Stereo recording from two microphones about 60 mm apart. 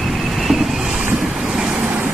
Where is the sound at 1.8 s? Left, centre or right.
Right.